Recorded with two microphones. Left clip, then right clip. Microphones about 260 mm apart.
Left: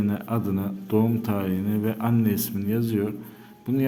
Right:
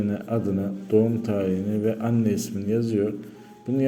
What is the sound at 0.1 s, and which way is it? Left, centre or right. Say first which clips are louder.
A man's voice: right 2 dB; centre.